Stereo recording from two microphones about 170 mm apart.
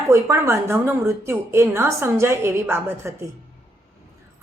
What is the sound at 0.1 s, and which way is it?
A woman's voice, 15° right (ahead or behind).